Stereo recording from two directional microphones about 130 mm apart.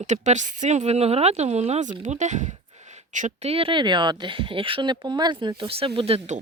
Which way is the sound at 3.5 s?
45° right (ahead or behind).